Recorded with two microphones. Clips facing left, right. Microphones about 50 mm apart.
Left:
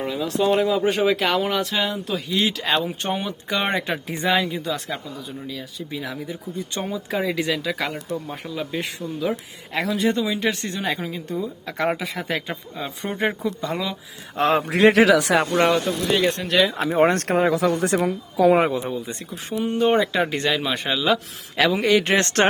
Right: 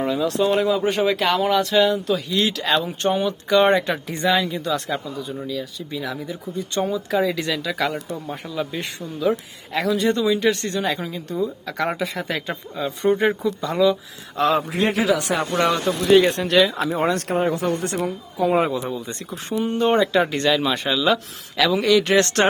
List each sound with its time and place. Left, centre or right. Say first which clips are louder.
0.0 s speech: right 2 dB; centre
14.3 s a man's voice: even; left
14.7 s speech: left 5 dB; left
16.3 s speech: right 2 dB; centre
16.7 s speech: even; left
17.0 s speech: left 6 dB; left
17.3 s speech: left 2 dB; left
18.8 s speech: even; centre
21.6 s speech: right 1 dB; left